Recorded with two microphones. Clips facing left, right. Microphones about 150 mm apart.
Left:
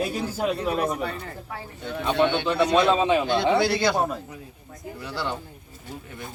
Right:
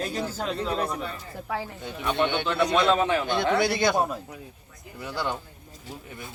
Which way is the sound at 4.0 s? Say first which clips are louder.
Left 1 dB; centre (ahead or behind).